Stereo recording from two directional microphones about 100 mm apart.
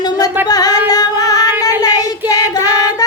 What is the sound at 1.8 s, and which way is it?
Child singing, 40° left (ahead or behind).